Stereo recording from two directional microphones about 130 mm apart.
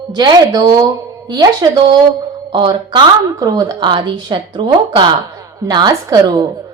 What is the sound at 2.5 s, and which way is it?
A woman's voice, 35° right (ahead or behind).